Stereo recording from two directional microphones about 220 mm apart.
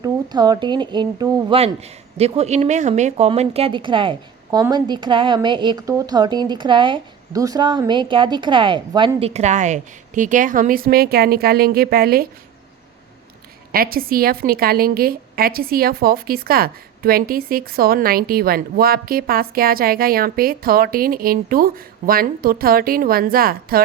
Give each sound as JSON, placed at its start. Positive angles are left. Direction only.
{"t": 0.0, "sound": "a woman's voice", "side_deg": -20}
{"t": 13.7, "sound": "a woman's voice", "side_deg": -40}